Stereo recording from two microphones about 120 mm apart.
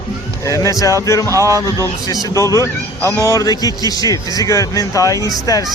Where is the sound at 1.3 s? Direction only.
25° right (ahead or behind).